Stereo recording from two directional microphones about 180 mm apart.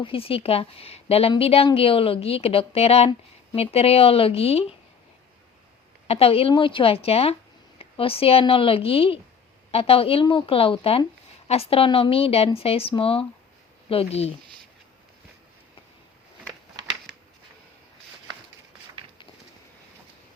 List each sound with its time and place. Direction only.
0.0 s a woman's voice: 30° left (ahead or behind)
6.1 s a woman's voice: 35° left (ahead or behind)